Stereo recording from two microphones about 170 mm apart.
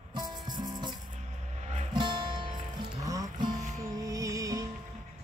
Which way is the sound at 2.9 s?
20° right (ahead or behind).